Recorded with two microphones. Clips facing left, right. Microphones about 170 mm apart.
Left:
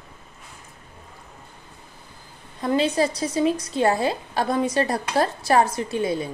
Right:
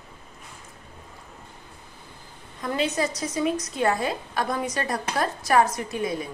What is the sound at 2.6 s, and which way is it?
A woman's voice, 30° left (ahead or behind).